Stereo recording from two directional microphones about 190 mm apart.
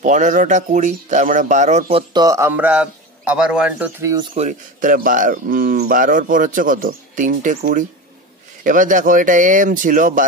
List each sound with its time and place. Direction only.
0.0 s speech: 40° right (ahead or behind)
2.2 s a man's voice: 15° right (ahead or behind)
4.0 s speech: 20° right (ahead or behind)
4.4 s speech: 40° right (ahead or behind)
8.6 s speech: 45° right (ahead or behind)